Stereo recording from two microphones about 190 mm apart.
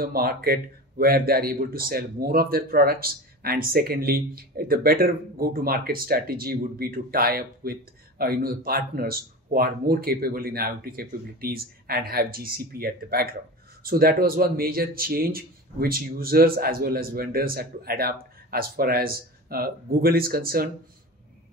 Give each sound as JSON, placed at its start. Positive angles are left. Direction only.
{"t": 0.0, "sound": "speech", "side_deg": -50}